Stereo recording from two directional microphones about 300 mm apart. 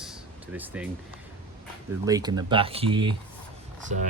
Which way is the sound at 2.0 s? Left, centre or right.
Centre.